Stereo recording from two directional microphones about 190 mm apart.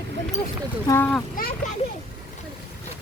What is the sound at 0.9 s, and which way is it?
Speech, 10° left (ahead or behind).